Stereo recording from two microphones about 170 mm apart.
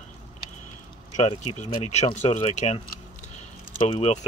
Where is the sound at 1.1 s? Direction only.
40° left (ahead or behind).